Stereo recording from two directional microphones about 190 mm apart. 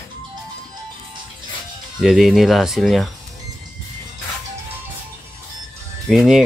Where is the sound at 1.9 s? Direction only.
Centre (ahead or behind).